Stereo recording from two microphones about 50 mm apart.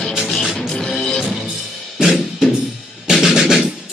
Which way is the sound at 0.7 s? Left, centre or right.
Centre.